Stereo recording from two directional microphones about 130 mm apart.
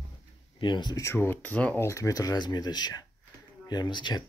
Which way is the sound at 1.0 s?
20° left (ahead or behind).